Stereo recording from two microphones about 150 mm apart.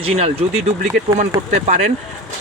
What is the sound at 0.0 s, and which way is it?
Speech, 40° right (ahead or behind).